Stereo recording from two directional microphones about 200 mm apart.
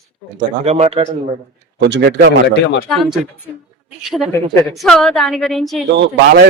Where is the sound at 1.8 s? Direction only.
60° right (ahead or behind).